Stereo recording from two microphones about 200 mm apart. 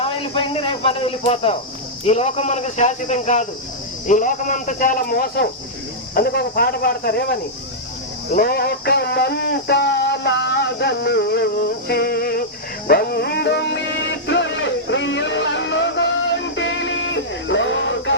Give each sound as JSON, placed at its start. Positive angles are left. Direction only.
{"t": 0.0, "sound": "speech", "side_deg": 30}
{"t": 8.3, "sound": "music", "side_deg": 50}
{"t": 11.9, "sound": "speech", "side_deg": 50}
{"t": 12.9, "sound": "music", "side_deg": 50}